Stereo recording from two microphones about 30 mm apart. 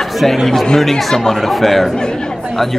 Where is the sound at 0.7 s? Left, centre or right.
Centre.